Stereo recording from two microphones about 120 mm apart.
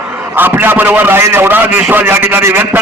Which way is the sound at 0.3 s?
15° right (ahead or behind).